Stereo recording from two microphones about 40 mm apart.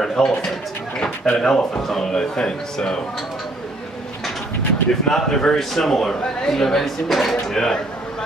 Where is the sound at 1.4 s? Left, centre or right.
Centre.